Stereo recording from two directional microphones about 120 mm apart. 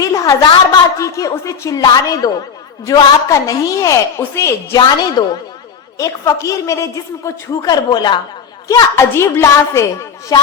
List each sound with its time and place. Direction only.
0.0 s a woman's voice: 30° left (ahead or behind)
4.9 s a woman's voice: 40° left (ahead or behind)
6.0 s a woman's voice: 30° left (ahead or behind)
8.6 s a woman's voice: 25° left (ahead or behind)